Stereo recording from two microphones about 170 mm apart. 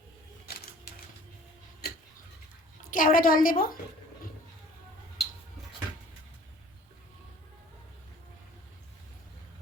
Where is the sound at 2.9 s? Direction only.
55° left (ahead or behind).